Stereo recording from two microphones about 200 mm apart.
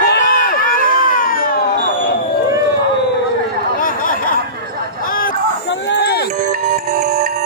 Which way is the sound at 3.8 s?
45° left (ahead or behind).